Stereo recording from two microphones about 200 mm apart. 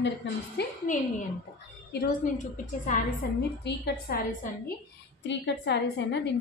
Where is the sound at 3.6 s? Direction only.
55° left (ahead or behind).